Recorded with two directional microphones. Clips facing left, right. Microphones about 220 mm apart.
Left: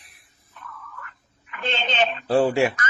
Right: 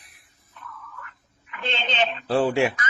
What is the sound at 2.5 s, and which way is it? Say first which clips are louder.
Speech: left 1 dB; 40° left (ahead or behind).